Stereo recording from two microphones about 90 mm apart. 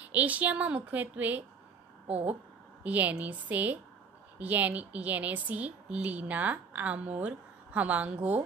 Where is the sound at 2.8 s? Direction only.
15° right (ahead or behind).